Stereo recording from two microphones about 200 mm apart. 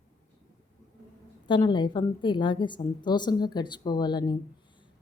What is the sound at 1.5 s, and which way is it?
A woman's voice, 25° left (ahead or behind).